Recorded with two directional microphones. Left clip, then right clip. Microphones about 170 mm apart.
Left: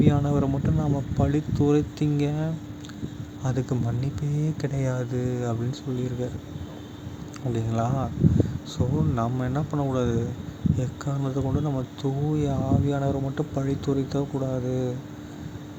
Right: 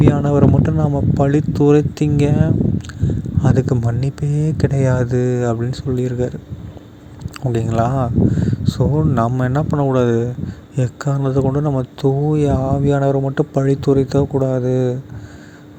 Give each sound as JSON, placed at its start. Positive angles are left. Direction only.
{"t": 0.0, "sound": "speech", "side_deg": -45}
{"t": 7.5, "sound": "speech", "side_deg": -50}